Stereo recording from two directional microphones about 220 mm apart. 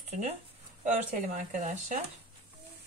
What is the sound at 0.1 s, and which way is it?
Speech, 30° right (ahead or behind).